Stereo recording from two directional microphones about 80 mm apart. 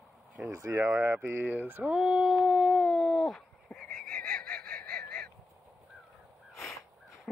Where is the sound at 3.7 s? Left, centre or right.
Centre.